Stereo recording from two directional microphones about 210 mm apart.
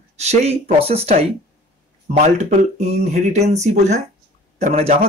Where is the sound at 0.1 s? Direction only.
30° right (ahead or behind).